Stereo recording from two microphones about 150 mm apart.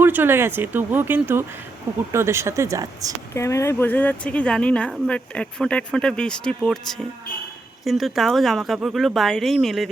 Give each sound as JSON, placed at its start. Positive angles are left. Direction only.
{"t": 0.0, "sound": "speech", "side_deg": -15}
{"t": 3.3, "sound": "a woman's voice", "side_deg": 20}